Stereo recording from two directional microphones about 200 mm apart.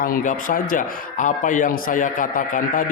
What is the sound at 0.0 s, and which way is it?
A man's voice, 45° left (ahead or behind).